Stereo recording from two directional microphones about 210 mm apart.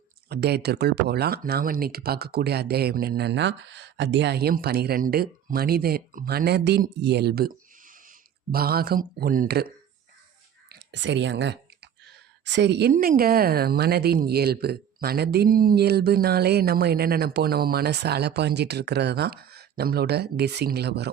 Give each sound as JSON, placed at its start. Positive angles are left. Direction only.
{"t": 0.3, "sound": "speech", "side_deg": -50}
{"t": 8.5, "sound": "speech", "side_deg": -45}
{"t": 10.7, "sound": "a sound", "side_deg": -55}
{"t": 12.5, "sound": "a woman's voice", "side_deg": -55}